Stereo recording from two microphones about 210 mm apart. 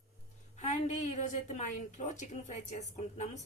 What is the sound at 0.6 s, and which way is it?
A woman's voice, 35° left (ahead or behind).